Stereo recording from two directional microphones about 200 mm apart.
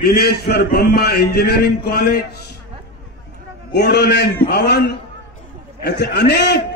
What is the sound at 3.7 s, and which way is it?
A man's voice, 55° left (ahead or behind).